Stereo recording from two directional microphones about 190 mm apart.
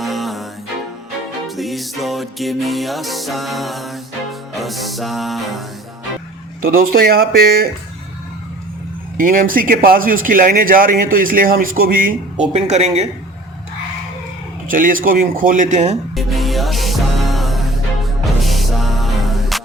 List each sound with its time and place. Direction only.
0.0 s music: centre (ahead or behind)
1.5 s music: centre (ahead or behind)
6.6 s speech: 50° right (ahead or behind)
9.1 s speech: 45° right (ahead or behind)
14.7 s speech: 45° right (ahead or behind)
16.1 s music: centre (ahead or behind)